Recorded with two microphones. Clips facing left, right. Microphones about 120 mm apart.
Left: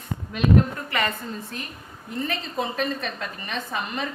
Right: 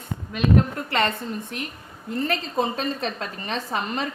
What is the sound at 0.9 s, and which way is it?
Speech, 25° right (ahead or behind).